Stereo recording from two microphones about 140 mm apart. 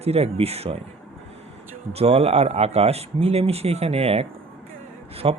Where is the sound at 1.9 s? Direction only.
45° right (ahead or behind).